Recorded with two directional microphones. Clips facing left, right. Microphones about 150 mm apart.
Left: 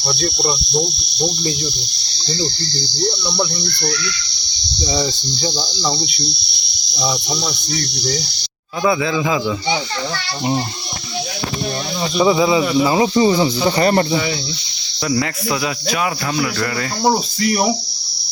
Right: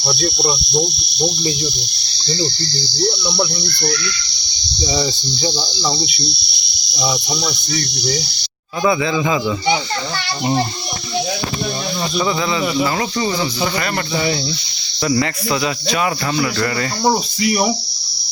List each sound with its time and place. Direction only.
0.0 s cricket: 10° right (ahead or behind)
4.9 s cricket: 5° right (ahead or behind)
8.8 s speech: centre (ahead or behind)
12.1 s speech: 10° left (ahead or behind); by 14.0 s 30° left (ahead or behind)
15.0 s speech: centre (ahead or behind)
17.4 s cricket: 5° right (ahead or behind)